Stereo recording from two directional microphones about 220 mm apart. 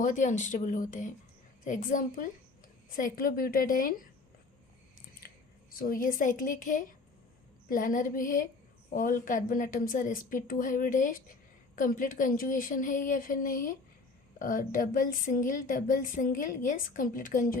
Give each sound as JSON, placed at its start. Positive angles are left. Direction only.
{"t": 0.0, "sound": "speech", "side_deg": 35}
{"t": 5.7, "sound": "speech", "side_deg": 40}